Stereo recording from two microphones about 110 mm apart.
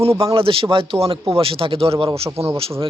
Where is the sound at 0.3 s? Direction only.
55° right (ahead or behind).